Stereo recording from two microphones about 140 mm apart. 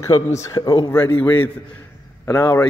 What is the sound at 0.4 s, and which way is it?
Speech, 25° left (ahead or behind).